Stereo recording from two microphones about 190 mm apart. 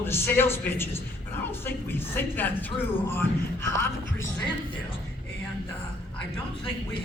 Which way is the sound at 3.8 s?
15° left (ahead or behind).